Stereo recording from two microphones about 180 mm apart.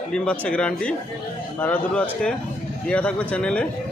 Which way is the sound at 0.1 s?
5° left (ahead or behind).